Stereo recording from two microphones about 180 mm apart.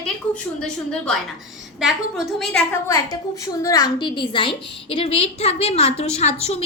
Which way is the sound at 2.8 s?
20° left (ahead or behind).